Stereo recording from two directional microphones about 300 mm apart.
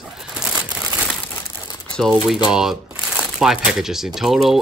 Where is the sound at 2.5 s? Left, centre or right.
Centre.